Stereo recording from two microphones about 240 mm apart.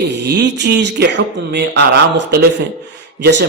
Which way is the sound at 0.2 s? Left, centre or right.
Right.